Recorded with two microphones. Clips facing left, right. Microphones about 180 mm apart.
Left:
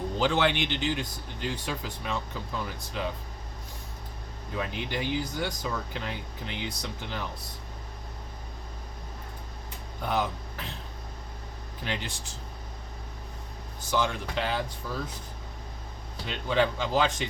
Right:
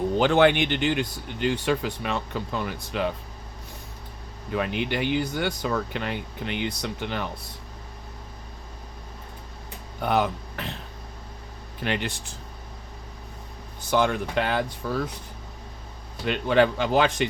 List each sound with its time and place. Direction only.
0.2 s speech: 55° right (ahead or behind)
4.5 s speech: 65° right (ahead or behind)
10.0 s speech: 65° right (ahead or behind)
11.8 s speech: 65° right (ahead or behind)
13.9 s speech: 55° right (ahead or behind)
16.2 s speech: 60° right (ahead or behind)